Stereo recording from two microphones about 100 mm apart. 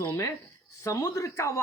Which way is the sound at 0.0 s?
30° left (ahead or behind).